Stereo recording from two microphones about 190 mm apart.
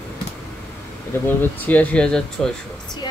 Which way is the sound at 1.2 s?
10° left (ahead or behind).